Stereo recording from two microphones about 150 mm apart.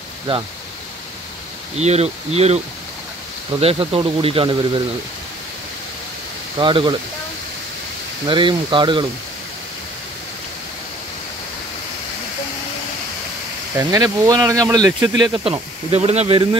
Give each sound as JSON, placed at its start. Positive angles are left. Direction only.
{"t": 1.8, "sound": "speech", "side_deg": -45}
{"t": 3.6, "sound": "speech", "side_deg": -40}
{"t": 6.6, "sound": "speech", "side_deg": -35}
{"t": 8.3, "sound": "speech", "side_deg": -30}
{"t": 13.7, "sound": "speech", "side_deg": -25}